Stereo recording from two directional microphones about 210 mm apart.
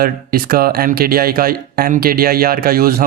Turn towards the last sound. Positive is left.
turn(degrees=-45)  # may be behind; listen again after turning